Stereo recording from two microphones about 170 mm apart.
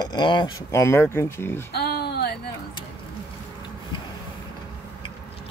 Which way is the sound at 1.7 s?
70° left (ahead or behind).